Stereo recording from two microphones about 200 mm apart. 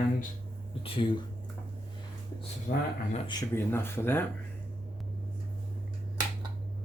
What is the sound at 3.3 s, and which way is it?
Speech, 20° left (ahead or behind).